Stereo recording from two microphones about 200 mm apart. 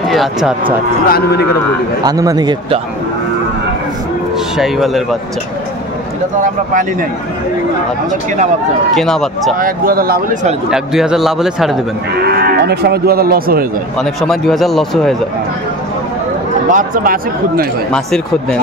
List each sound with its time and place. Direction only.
0.1 s speech: centre (ahead or behind)
1.0 s a man's voice: 50° left (ahead or behind)
2.0 s a man's voice: 20° right (ahead or behind)
4.6 s speech: centre (ahead or behind)
6.4 s speech: 40° right (ahead or behind)
8.9 s speech: centre (ahead or behind)
9.6 s cattle: 45° right (ahead or behind)
10.7 s speech: 5° right (ahead or behind)
12.2 s cattle: 50° right (ahead or behind)
13.9 s speech: centre (ahead or behind)
16.7 s cattle: 45° right (ahead or behind)
17.9 s speech: 5° left (ahead or behind)